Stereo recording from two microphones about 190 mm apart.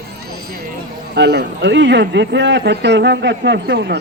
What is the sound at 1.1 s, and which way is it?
A man's voice, 60° right (ahead or behind).